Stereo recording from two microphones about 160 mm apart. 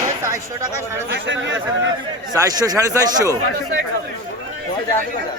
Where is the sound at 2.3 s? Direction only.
25° right (ahead or behind).